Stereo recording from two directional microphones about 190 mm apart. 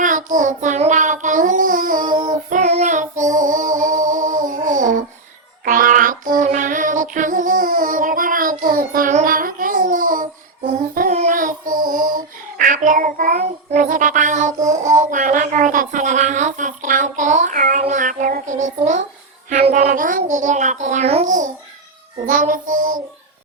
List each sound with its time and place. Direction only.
0.0 s child singing: 40° right (ahead or behind)
2.1 s child singing: 25° right (ahead or behind)
2.5 s child singing: 40° right (ahead or behind)